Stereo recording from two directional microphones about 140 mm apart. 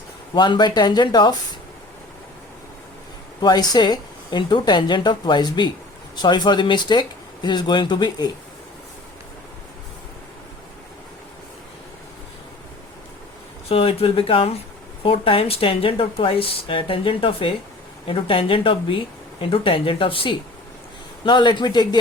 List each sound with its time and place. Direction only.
0.3 s speech: 35° left (ahead or behind)
3.4 s speech: 30° left (ahead or behind)
13.7 s speech: 40° left (ahead or behind)